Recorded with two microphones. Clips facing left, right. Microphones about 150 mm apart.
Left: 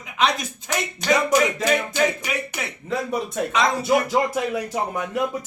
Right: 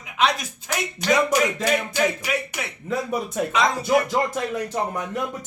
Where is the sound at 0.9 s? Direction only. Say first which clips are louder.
Left 1 dB; 5° right (ahead or behind).